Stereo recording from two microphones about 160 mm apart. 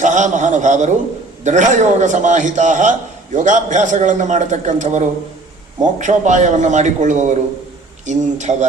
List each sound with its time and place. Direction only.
0.0 s a man's voice: 50° right (ahead or behind)